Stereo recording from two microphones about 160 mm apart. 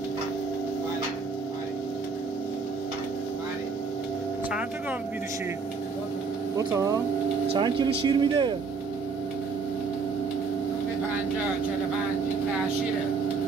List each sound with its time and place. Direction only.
6.5 s speech: 20° right (ahead or behind)